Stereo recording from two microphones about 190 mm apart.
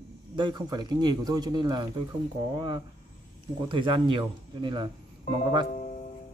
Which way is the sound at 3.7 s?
25° right (ahead or behind).